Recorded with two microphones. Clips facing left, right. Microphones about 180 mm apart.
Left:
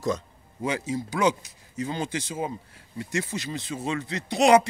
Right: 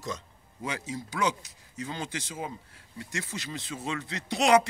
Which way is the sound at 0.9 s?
20° left (ahead or behind).